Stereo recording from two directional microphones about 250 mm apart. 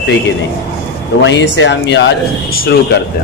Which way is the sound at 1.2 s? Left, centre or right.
Left.